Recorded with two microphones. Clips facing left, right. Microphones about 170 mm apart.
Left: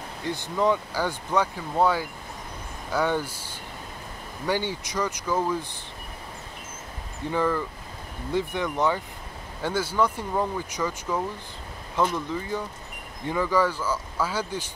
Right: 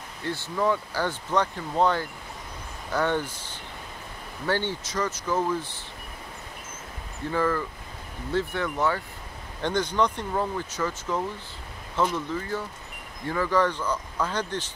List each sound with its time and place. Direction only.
0.2 s speech: 15° left (ahead or behind)
7.2 s speech: 15° left (ahead or behind)
9.6 s speech: 5° left (ahead or behind)